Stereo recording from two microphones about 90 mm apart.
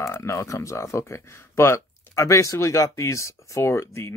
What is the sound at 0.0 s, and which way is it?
Speech, 35° left (ahead or behind).